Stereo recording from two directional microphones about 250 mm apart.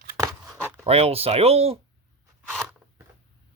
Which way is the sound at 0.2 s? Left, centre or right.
Centre.